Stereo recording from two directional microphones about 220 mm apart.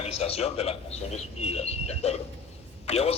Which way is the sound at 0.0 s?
25° left (ahead or behind).